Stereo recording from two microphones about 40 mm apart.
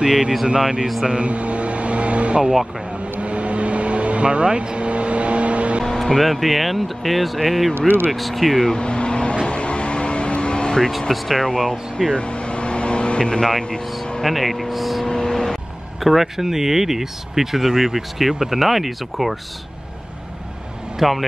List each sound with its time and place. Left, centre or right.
0.0 s speech: centre
1.0 s vehicle: right
5.9 s speech: centre
8.7 s vehicle: left
10.9 s speech: centre
12.1 s vehicle: left
13.4 s speech: centre
15.0 s vehicle: centre
16.0 s speech: centre
21.0 s speech: centre